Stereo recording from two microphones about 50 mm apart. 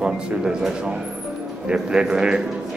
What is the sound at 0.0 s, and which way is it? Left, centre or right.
A man's voice, centre.